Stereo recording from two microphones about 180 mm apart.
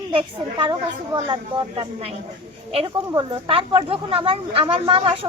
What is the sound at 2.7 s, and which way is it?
Speech, 30° right (ahead or behind).